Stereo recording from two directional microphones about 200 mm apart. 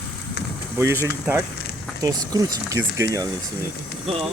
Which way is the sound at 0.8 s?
15° right (ahead or behind).